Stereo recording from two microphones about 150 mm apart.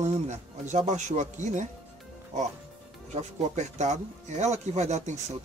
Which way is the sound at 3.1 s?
50° right (ahead or behind).